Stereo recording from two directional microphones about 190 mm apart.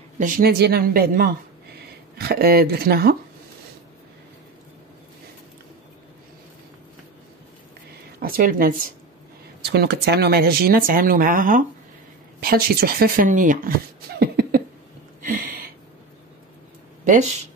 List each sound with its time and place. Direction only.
0.2 s speech: 55° right (ahead or behind)
8.2 s speech: 50° right (ahead or behind)
9.6 s speech: 60° right (ahead or behind)
15.2 s a sound: 45° right (ahead or behind)
17.0 s speech: 40° right (ahead or behind)